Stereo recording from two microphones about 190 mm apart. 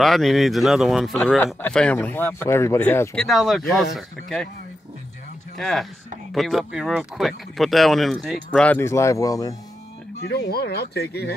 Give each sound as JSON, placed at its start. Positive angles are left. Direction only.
{"t": 0.0, "sound": "speech", "side_deg": 0}
{"t": 3.3, "sound": "speech", "side_deg": 0}
{"t": 5.6, "sound": "speech", "side_deg": 0}
{"t": 10.2, "sound": "speech", "side_deg": 60}